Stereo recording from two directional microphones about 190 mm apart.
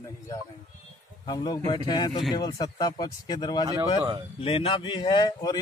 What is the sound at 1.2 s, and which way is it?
Speech, 20° left (ahead or behind).